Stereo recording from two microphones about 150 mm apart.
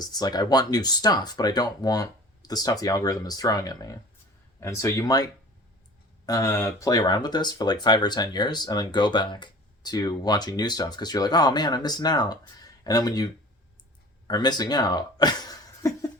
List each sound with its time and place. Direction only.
0.0 s speech: 25° left (ahead or behind)
6.2 s speech: 25° left (ahead or behind)